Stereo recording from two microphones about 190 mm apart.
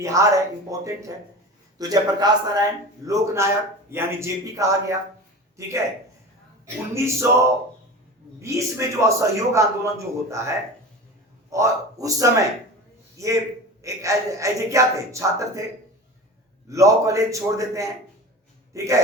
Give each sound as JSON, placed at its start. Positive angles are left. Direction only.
{"t": 0.0, "sound": "a man's voice", "side_deg": -15}
{"t": 6.9, "sound": "a man's voice", "side_deg": -15}
{"t": 11.5, "sound": "a man's voice", "side_deg": -15}
{"t": 16.6, "sound": "a man's voice", "side_deg": -15}